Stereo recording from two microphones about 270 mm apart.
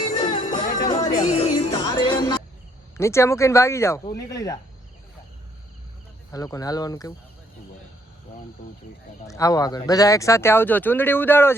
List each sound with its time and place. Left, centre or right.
0.2 s music: left
0.9 s music: centre
3.0 s speech: centre
6.3 s speech: centre
9.2 s speech: centre